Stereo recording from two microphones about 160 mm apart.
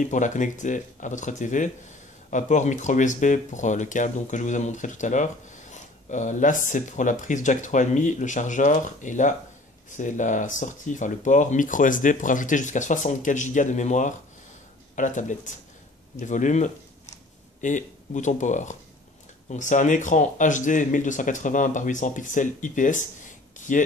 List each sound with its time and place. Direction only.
0.0 s speech: 50° left (ahead or behind)